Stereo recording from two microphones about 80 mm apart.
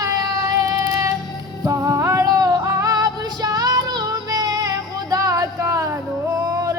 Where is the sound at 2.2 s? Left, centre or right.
Right.